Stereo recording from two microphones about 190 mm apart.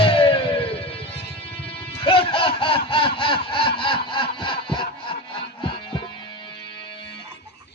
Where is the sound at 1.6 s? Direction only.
30° left (ahead or behind).